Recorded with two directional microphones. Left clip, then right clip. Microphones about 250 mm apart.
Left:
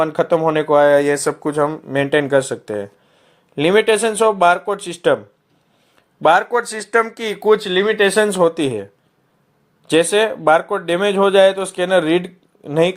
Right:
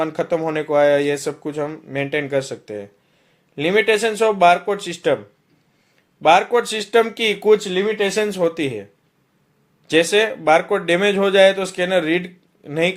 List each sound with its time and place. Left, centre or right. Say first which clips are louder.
0.0 s speech: left 5 dB; centre
6.2 s speech: even; centre
9.9 s speech: left 1 dB; centre